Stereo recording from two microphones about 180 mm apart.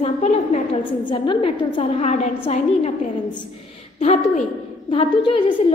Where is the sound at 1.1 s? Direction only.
30° left (ahead or behind).